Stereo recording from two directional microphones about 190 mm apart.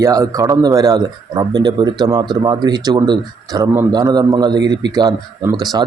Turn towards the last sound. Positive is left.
turn(degrees=-20)  # may be behind; listen again after turning